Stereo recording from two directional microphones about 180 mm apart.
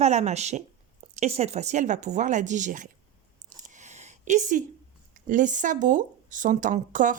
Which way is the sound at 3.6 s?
40° right (ahead or behind).